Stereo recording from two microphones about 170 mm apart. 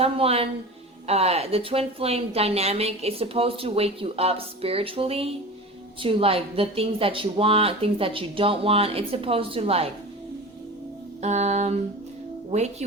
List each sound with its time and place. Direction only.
0.0 s speech: 35° right (ahead or behind)
11.2 s speech: 40° right (ahead or behind)